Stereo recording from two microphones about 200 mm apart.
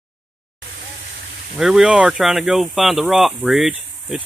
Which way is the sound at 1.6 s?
Centre (ahead or behind).